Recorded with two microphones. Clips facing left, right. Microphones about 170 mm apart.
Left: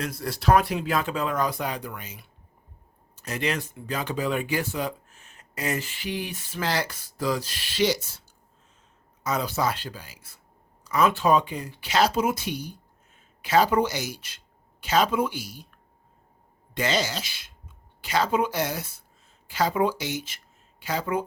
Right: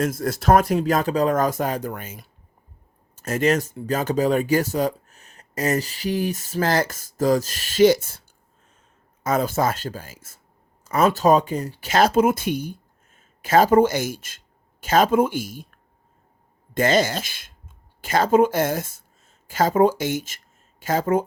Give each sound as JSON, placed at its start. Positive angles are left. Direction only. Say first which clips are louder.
{"t": 0.0, "sound": "speech", "louder": "right 6 dB", "side_deg": -45}
{"t": 9.2, "sound": "speech", "louder": "right 5 dB", "side_deg": -50}